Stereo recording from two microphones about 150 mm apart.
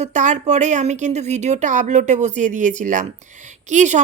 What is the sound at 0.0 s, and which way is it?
Speech, 55° right (ahead or behind).